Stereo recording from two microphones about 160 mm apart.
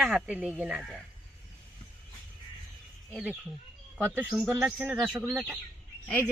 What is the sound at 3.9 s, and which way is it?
Speech, 10° right (ahead or behind).